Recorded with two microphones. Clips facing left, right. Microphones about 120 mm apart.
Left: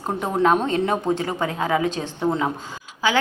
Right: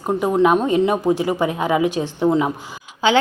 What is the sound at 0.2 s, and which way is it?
A woman's voice, 5° right (ahead or behind).